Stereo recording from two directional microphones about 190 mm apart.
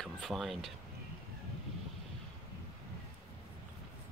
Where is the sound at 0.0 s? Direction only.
Centre (ahead or behind).